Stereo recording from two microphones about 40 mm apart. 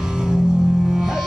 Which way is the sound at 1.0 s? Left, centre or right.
Centre.